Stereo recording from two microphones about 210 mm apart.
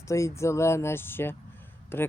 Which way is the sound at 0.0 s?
15° left (ahead or behind).